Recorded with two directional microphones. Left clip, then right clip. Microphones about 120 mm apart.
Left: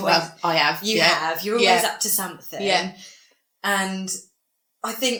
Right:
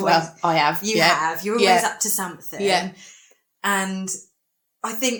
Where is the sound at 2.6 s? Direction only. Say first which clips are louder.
Right 1 dB; 50° right (ahead or behind).